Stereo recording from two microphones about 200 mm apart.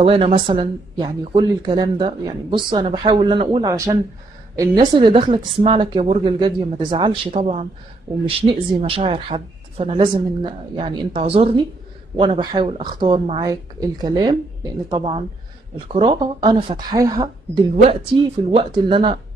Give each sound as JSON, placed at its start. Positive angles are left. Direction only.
{"t": 0.0, "sound": "speech", "side_deg": -30}